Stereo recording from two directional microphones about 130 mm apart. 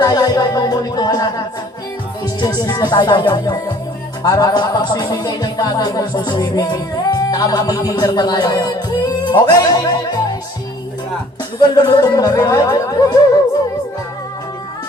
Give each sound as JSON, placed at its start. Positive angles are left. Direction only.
{"t": 0.0, "sound": "speech", "side_deg": 30}
{"t": 2.4, "sound": "music", "side_deg": 30}
{"t": 11.6, "sound": "speech", "side_deg": 30}